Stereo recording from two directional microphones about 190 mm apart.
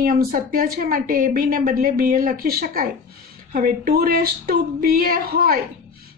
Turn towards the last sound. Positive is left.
turn(degrees=-50)  # may be behind; listen again after turning